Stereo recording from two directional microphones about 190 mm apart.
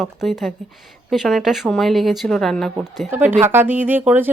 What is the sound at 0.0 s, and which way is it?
Speech, centre (ahead or behind).